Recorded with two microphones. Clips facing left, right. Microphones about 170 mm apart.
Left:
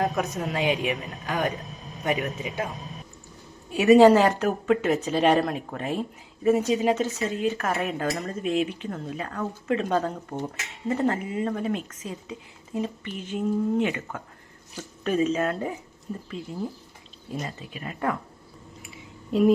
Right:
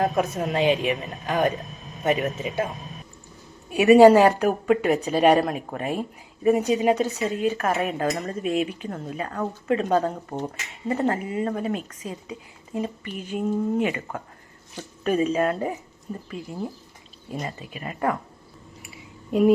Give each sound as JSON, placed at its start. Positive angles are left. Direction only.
{"t": 0.3, "sound": "speech", "side_deg": -25}
{"t": 3.8, "sound": "speech", "side_deg": -10}
{"t": 10.3, "sound": "speech", "side_deg": -15}
{"t": 15.0, "sound": "speech", "side_deg": -5}
{"t": 17.4, "sound": "speech", "side_deg": -5}
{"t": 19.3, "sound": "speech", "side_deg": -5}